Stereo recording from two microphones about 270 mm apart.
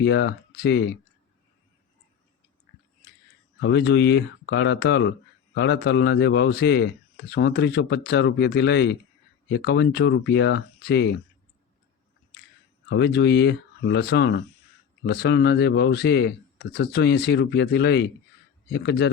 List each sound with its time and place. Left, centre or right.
0.0 s speech: left
3.6 s speech: left
12.9 s speech: left